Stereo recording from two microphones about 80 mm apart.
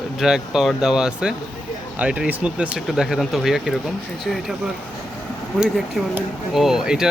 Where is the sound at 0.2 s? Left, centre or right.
Centre.